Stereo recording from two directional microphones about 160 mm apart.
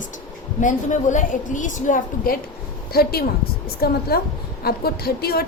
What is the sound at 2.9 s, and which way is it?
A woman's voice, 75° left (ahead or behind).